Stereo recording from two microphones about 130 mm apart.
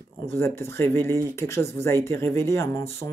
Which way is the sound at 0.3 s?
20° left (ahead or behind).